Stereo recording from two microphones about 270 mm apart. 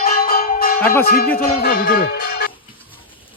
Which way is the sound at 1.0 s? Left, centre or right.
Left.